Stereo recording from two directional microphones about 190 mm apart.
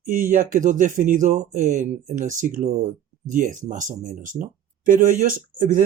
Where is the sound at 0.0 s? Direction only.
45° right (ahead or behind).